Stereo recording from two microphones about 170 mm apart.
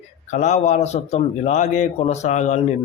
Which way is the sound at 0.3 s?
45° left (ahead or behind).